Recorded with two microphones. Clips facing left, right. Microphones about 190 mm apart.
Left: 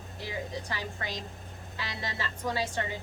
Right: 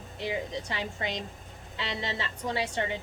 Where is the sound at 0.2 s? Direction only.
25° right (ahead or behind).